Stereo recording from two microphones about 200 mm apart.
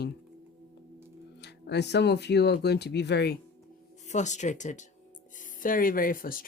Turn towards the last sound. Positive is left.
turn(degrees=45)  # may be behind; listen again after turning